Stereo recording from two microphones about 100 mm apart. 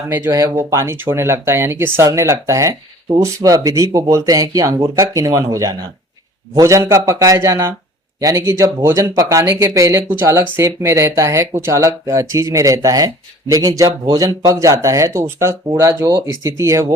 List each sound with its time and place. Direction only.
0.1 s speech: 30° right (ahead or behind)